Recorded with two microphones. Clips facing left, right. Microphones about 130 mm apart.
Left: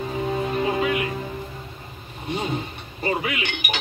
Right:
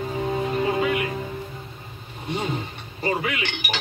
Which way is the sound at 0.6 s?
20° left (ahead or behind).